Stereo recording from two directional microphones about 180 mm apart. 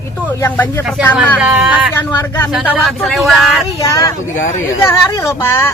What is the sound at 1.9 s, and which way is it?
Speech, 10° left (ahead or behind).